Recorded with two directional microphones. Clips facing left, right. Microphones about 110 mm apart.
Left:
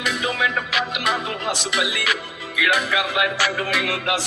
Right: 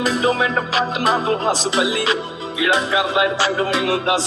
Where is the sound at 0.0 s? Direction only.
35° right (ahead or behind).